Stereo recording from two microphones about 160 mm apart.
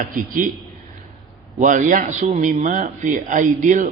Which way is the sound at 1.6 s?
50° right (ahead or behind).